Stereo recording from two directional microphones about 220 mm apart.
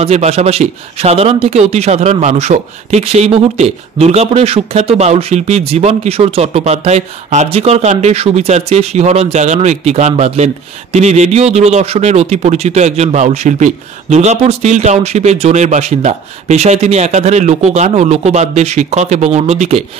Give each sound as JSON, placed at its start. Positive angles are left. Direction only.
{"t": 0.0, "sound": "speech", "side_deg": -30}